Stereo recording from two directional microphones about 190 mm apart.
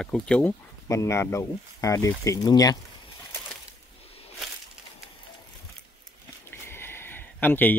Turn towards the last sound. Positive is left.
turn(degrees=10)  # may be behind; listen again after turning